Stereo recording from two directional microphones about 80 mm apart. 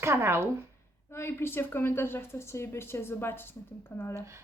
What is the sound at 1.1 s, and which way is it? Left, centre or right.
A woman's voice, left.